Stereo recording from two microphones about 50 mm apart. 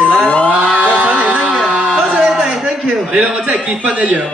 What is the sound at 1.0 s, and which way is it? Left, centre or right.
Speech, right.